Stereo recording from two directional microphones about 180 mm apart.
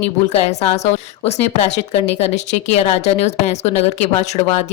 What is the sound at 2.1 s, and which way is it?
Speech, 40° left (ahead or behind).